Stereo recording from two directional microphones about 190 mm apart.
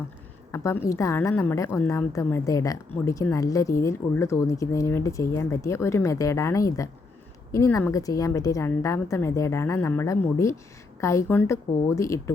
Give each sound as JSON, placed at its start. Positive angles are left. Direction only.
{"t": 0.5, "sound": "speech", "side_deg": 15}